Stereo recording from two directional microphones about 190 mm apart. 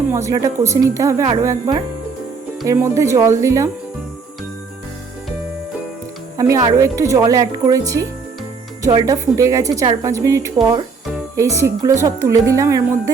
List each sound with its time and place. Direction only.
0.1 s a woman's voice: 15° right (ahead or behind)
6.3 s a woman's voice: 15° right (ahead or behind)